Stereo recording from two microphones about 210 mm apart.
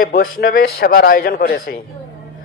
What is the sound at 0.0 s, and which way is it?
A man's voice, 45° left (ahead or behind).